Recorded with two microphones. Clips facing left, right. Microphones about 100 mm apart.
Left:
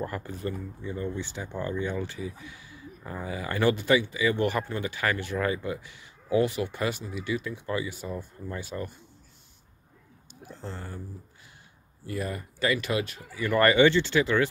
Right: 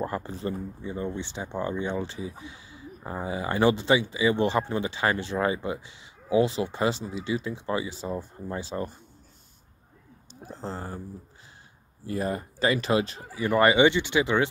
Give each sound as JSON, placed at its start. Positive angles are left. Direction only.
{"t": 0.0, "sound": "speech", "side_deg": -25}
{"t": 10.4, "sound": "speech", "side_deg": -35}
{"t": 12.1, "sound": "speech", "side_deg": -30}